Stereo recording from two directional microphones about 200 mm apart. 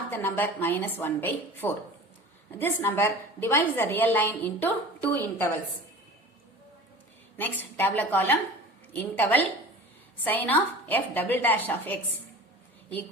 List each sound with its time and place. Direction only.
0.1 s a woman's voice: 10° left (ahead or behind)
7.3 s a woman's voice: 10° left (ahead or behind)